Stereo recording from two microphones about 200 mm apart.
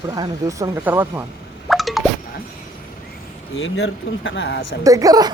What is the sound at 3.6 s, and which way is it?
Speech, 70° left (ahead or behind).